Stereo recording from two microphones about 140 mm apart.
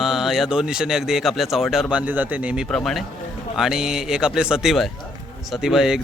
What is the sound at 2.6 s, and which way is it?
Speech, 5° left (ahead or behind).